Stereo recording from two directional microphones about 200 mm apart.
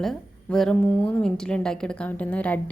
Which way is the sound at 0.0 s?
Centre (ahead or behind).